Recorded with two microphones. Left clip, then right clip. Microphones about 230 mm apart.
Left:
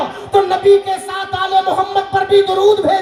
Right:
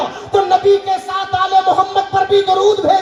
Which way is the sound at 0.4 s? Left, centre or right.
Left.